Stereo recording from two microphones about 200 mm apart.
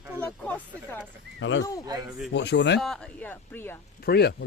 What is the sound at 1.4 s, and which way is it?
Speech, 70° left (ahead or behind).